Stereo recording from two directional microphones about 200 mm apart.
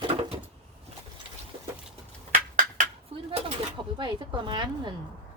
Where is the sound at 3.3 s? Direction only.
25° right (ahead or behind).